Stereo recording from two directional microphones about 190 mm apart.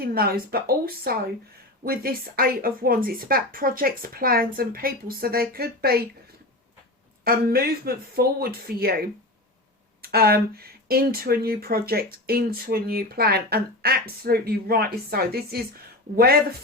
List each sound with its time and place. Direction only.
0.0 s speech: 55° right (ahead or behind)
7.3 s speech: 50° right (ahead or behind)